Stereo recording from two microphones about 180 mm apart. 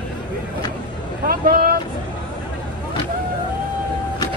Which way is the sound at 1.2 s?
55° right (ahead or behind).